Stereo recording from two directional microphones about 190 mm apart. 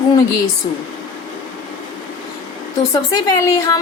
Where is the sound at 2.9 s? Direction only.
20° left (ahead or behind).